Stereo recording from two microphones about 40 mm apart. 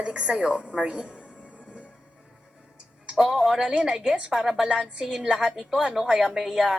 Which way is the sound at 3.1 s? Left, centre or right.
Centre.